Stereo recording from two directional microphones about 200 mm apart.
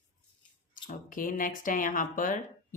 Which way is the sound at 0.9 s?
45° left (ahead or behind).